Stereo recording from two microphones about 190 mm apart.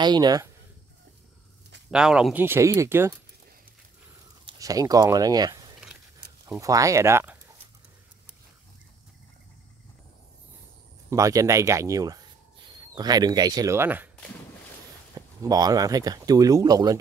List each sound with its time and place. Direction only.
0.0 s speech: 20° right (ahead or behind)
1.9 s speech: 5° right (ahead or behind)
4.5 s speech: 20° right (ahead or behind)
11.1 s speech: 15° right (ahead or behind)
15.1 s speech: 20° right (ahead or behind)